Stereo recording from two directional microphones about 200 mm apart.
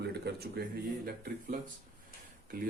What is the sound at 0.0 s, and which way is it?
Speech, 55° right (ahead or behind).